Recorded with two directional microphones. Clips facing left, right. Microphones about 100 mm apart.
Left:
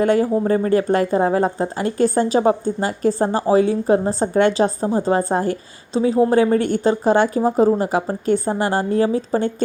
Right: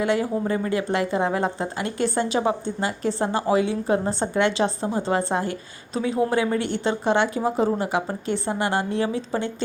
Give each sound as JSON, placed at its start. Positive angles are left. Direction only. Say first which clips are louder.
{"t": 0.0, "sound": "speech", "louder": "left 6 dB", "side_deg": 40}